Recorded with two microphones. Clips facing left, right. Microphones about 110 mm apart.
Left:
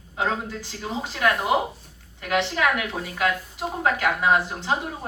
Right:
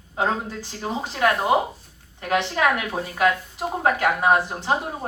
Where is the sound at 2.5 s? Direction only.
30° right (ahead or behind).